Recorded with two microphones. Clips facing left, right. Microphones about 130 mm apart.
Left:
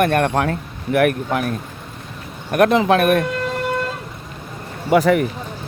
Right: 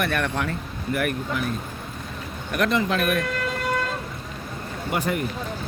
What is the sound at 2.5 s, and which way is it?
Speech, 55° left (ahead or behind).